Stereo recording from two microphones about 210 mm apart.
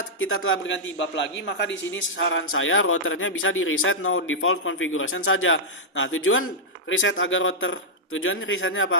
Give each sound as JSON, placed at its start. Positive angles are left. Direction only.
{"t": 0.2, "sound": "a man's voice", "side_deg": 75}